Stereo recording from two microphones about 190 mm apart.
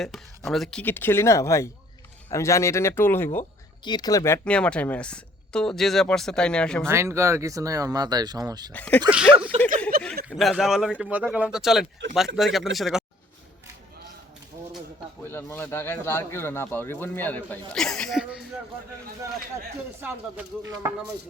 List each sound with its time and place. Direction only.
0.0 s speech: centre (ahead or behind)
6.8 s speech: 15° right (ahead or behind)
8.7 s speech: 10° left (ahead or behind)
9.0 s speech: 5° right (ahead or behind)
9.9 s a sound: 55° right (ahead or behind)
10.2 s speech: 5° right (ahead or behind)
15.2 s speech: 10° left (ahead or behind); by 18.4 s 5° right (ahead or behind)
20.0 s speech: 10° right (ahead or behind)